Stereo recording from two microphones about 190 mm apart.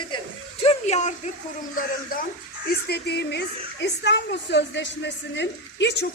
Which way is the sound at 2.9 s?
60° left (ahead or behind).